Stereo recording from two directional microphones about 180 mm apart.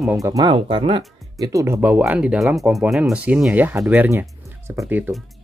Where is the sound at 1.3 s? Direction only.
20° right (ahead or behind).